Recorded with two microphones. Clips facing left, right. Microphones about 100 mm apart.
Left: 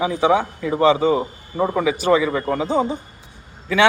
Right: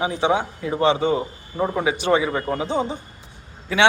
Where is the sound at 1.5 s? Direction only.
55° left (ahead or behind).